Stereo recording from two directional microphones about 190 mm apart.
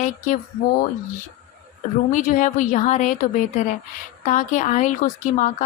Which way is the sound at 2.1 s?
45° left (ahead or behind).